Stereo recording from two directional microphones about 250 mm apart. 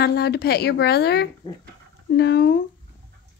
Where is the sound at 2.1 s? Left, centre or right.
Left.